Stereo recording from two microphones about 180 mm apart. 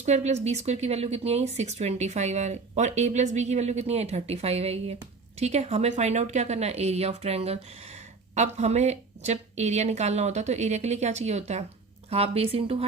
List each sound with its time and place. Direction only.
0.0 s speech: 40° right (ahead or behind)